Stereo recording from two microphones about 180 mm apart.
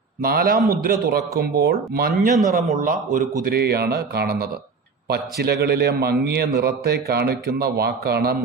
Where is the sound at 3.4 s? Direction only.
60° right (ahead or behind).